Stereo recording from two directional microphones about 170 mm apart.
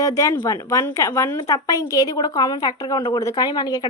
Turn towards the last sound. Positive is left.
turn(degrees=25)  # may be behind; listen again after turning